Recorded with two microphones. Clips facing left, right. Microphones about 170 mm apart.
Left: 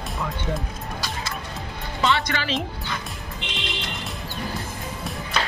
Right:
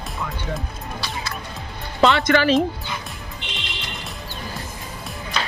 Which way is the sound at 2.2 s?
50° right (ahead or behind).